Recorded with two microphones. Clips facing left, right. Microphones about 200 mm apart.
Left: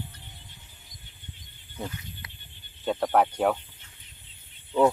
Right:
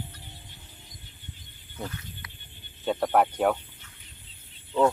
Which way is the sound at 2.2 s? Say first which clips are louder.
Even; 25° left (ahead or behind).